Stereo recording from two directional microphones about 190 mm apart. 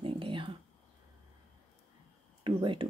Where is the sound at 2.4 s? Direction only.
25° right (ahead or behind).